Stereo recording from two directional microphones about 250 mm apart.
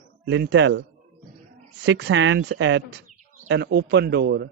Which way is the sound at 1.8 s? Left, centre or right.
Right.